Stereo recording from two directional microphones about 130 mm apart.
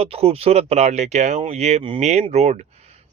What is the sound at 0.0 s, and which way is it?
Speech, 50° right (ahead or behind).